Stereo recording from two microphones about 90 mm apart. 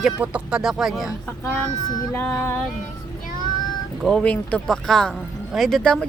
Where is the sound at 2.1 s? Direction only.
15° left (ahead or behind).